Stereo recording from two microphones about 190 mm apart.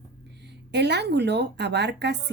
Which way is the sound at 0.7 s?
60° right (ahead or behind).